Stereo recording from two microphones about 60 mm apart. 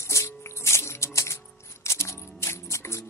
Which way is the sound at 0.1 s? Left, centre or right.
Left.